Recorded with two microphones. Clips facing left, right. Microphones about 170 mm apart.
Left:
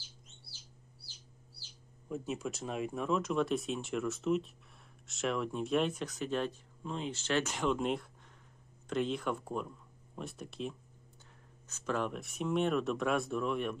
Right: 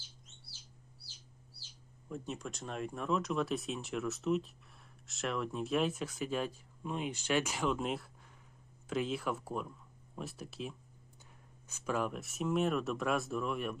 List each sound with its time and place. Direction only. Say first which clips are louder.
2.0 s speech: left 4 dB; 5° left (ahead or behind)